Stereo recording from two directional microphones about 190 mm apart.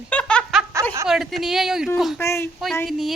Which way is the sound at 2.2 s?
15° left (ahead or behind).